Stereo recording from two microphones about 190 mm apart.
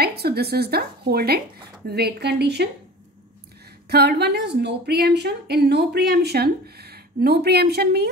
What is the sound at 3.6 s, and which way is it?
A woman's voice, 60° right (ahead or behind).